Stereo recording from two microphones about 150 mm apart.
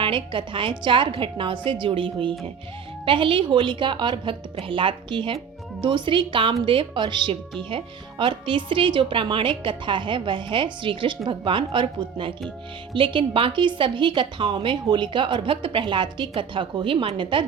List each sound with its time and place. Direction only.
0.0 s speech: 35° right (ahead or behind)